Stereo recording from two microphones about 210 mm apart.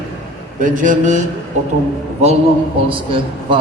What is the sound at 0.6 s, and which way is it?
Speech, 40° right (ahead or behind).